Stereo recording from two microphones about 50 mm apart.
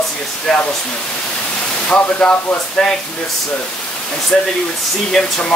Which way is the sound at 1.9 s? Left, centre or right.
Left.